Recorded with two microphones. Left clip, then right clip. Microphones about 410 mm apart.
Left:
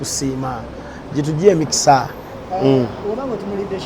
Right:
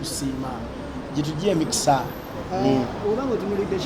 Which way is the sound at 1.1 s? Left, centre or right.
Left.